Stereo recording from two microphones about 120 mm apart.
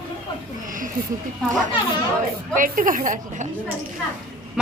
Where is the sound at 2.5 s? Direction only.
90° right.